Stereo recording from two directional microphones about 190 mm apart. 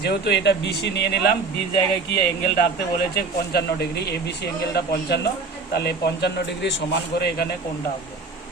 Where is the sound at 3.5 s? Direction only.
60° left (ahead or behind).